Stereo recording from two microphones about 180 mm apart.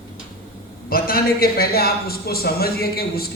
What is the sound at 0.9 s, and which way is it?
A man's voice, 55° left (ahead or behind).